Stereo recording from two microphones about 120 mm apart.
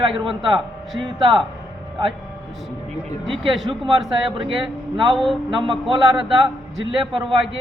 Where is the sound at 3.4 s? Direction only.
45° right (ahead or behind).